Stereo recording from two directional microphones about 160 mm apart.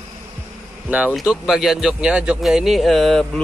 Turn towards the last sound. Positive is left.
turn(degrees=5)  # may be behind; listen again after turning